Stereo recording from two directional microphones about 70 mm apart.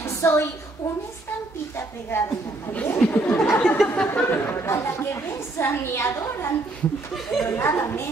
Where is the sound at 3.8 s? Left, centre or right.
Centre; by 6.5 s left.